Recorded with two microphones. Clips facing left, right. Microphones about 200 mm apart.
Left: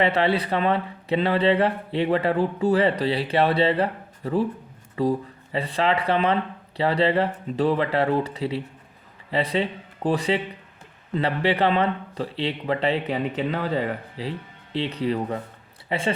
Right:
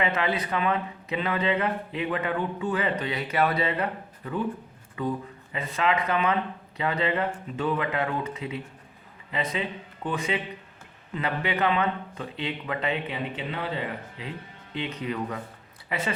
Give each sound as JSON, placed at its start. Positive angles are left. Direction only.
{"t": 0.0, "sound": "speech", "side_deg": 30}